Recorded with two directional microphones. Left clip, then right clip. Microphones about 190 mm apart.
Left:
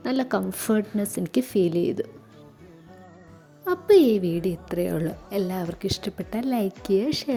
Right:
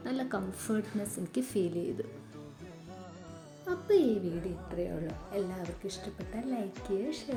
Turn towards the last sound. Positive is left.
turn(degrees=55)  # may be behind; listen again after turning